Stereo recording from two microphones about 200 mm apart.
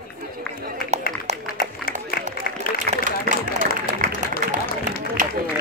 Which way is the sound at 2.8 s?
40° right (ahead or behind).